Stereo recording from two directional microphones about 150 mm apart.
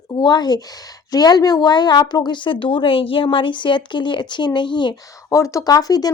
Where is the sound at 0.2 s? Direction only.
30° left (ahead or behind).